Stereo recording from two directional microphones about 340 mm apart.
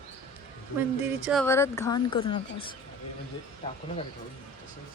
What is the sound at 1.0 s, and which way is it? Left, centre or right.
Speech, centre.